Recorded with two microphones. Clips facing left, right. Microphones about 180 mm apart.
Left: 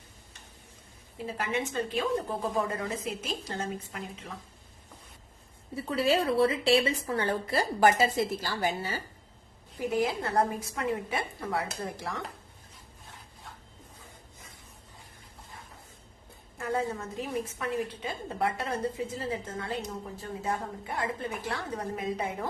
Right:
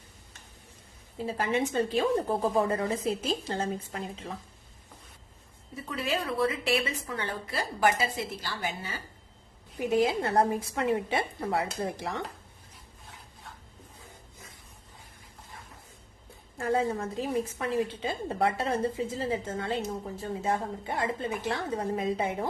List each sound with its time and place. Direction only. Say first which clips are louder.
1.2 s a woman's voice: right 4 dB; 30° right (ahead or behind)
5.7 s a woman's voice: left 5 dB; 30° left (ahead or behind)
9.7 s a woman's voice: right 3 dB; 25° right (ahead or behind)
16.6 s a woman's voice: right 4 dB; 30° right (ahead or behind)